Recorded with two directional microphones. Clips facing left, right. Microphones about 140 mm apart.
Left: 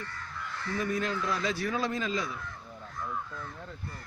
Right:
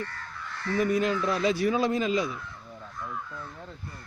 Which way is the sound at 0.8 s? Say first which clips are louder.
Right 6 dB; 15° right (ahead or behind).